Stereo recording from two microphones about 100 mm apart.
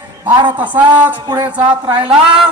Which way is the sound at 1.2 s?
45° right (ahead or behind).